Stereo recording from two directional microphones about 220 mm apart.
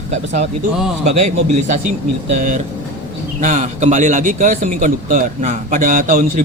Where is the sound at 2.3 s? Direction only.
35° right (ahead or behind).